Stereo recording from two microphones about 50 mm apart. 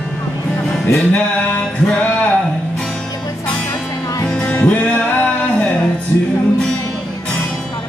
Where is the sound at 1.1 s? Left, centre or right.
Left.